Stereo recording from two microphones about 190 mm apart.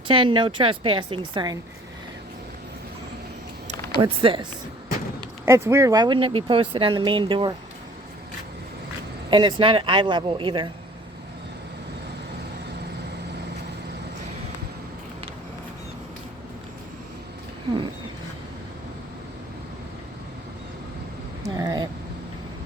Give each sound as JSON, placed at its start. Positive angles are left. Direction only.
{"t": 0.1, "sound": "speech", "side_deg": -25}
{"t": 3.9, "sound": "speech", "side_deg": -25}
{"t": 5.5, "sound": "speech", "side_deg": -15}
{"t": 9.3, "sound": "speech", "side_deg": -25}
{"t": 21.4, "sound": "a sound", "side_deg": -20}